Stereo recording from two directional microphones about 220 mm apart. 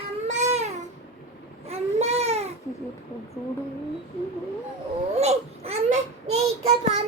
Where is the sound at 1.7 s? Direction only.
30° right (ahead or behind).